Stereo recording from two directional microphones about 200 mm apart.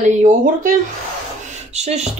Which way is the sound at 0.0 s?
35° right (ahead or behind).